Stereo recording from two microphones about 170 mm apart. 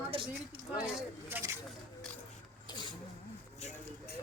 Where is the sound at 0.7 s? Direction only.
5° right (ahead or behind).